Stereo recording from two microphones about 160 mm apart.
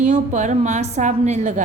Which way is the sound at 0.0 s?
50° right (ahead or behind).